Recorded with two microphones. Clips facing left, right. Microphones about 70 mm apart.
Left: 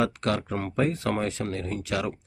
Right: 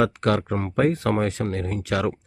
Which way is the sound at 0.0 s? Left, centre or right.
Right.